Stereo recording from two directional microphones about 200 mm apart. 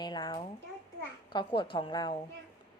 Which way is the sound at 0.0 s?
20° left (ahead or behind).